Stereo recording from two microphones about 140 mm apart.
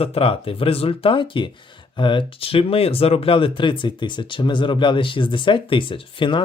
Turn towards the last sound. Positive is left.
turn(degrees=35)  # may be behind; listen again after turning